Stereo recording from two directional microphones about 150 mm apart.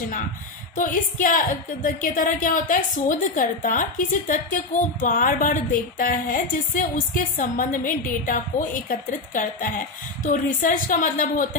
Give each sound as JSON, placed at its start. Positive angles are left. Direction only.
{"t": 0.7, "sound": "a woman's voice", "side_deg": 60}